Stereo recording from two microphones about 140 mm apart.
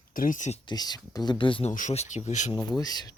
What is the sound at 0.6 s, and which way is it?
Speech, 30° left (ahead or behind).